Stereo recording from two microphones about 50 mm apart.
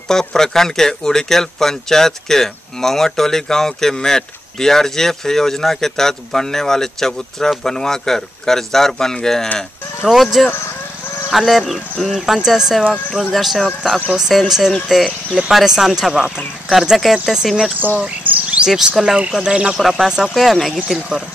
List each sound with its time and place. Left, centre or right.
0.1 s speech: centre
10.0 s speech: centre
17.7 s speech: right
18.0 s speech: right
18.7 s speech: centre
19.8 s speech: centre